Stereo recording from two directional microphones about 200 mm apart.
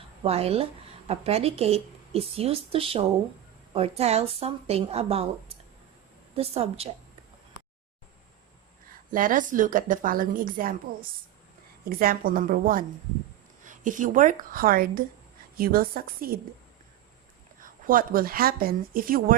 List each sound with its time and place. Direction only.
0.2 s a woman's voice: 30° right (ahead or behind)
6.3 s a woman's voice: 30° right (ahead or behind)
9.1 s a woman's voice: 40° right (ahead or behind)
11.9 s a woman's voice: 45° right (ahead or behind)
17.6 s a woman's voice: 45° right (ahead or behind)